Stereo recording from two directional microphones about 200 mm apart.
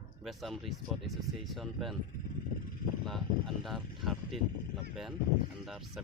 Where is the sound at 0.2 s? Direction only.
Centre (ahead or behind).